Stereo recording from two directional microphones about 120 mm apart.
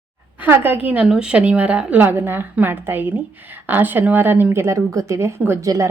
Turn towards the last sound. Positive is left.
turn(degrees=-20)  # may be behind; listen again after turning